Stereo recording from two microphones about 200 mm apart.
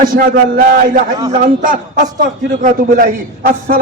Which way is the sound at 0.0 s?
45° right (ahead or behind).